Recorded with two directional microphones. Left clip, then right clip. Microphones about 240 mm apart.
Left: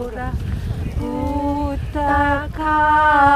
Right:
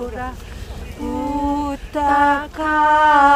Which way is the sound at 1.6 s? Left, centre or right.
Right.